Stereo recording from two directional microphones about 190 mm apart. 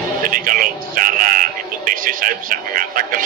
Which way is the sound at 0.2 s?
45° right (ahead or behind).